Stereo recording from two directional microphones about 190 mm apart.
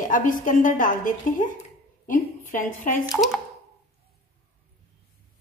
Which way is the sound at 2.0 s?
45° left (ahead or behind).